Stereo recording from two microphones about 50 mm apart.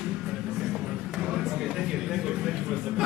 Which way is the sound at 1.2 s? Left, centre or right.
Centre.